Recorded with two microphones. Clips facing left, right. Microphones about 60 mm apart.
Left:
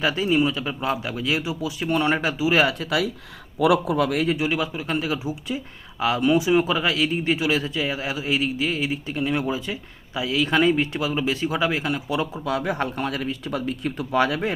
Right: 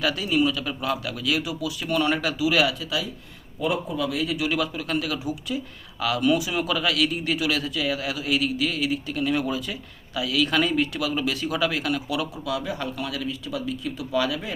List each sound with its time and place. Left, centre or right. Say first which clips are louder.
0.0 s speech: left 2 dB; left
3.6 s speech: left 7 dB; left
3.9 s speech: left 5 dB; left
4.4 s speech: left 1 dB; left
12.5 s speech: left 5 dB; left